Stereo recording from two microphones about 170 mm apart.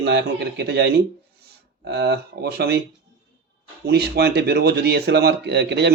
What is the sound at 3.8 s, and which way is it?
A man's voice, 70° right (ahead or behind).